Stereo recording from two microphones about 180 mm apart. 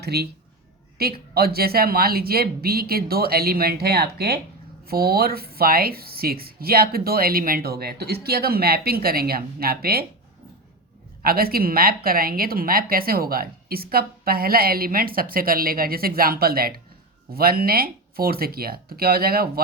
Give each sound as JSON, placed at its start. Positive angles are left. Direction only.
{"t": 0.0, "sound": "a woman's voice", "side_deg": -65}
{"t": 11.2, "sound": "a woman's voice", "side_deg": -55}